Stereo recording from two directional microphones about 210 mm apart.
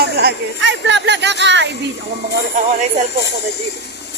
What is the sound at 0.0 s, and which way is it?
Speech, 50° right (ahead or behind).